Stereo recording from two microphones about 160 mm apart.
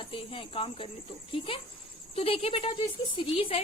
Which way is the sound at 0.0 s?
35° left (ahead or behind).